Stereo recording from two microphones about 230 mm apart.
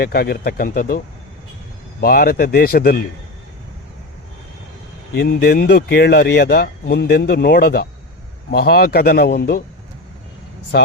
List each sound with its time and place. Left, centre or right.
0.0 s speech: left
5.1 s speech: left
10.7 s speech: left